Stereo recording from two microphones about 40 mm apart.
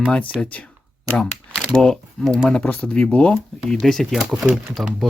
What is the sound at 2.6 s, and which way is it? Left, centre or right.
Speech, left.